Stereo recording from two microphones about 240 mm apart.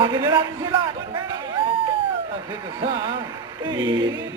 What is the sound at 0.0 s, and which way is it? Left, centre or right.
Speech, centre.